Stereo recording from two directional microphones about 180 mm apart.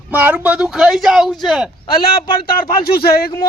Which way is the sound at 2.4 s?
55° left (ahead or behind).